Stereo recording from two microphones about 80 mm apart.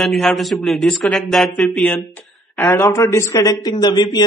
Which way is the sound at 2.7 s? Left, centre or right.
Left.